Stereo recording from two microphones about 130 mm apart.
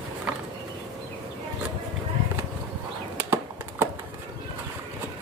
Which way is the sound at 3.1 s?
15° right (ahead or behind).